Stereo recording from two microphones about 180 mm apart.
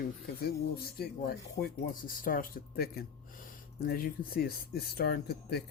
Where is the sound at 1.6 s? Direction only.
35° left (ahead or behind).